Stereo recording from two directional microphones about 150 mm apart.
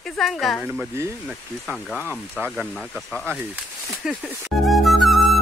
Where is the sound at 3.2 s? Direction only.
10° right (ahead or behind).